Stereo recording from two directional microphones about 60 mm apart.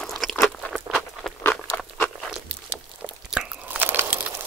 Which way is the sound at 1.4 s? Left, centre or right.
Left.